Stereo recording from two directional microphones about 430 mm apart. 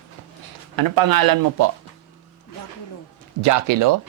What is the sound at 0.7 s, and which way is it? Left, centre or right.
Speech, right.